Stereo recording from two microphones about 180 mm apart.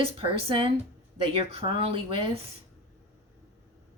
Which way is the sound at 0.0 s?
30° right (ahead or behind).